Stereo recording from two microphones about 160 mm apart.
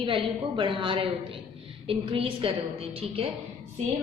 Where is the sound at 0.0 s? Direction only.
35° right (ahead or behind).